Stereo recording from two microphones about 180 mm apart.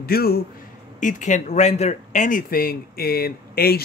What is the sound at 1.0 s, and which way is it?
Speech, 40° left (ahead or behind).